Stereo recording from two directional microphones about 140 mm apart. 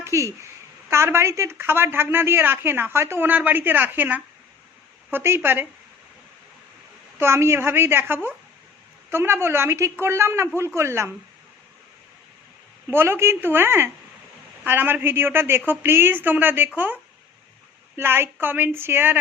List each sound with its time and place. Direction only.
0.0 s a woman's voice: 20° right (ahead or behind)
7.2 s a woman's voice: 20° right (ahead or behind)
12.9 s a woman's voice: 15° right (ahead or behind)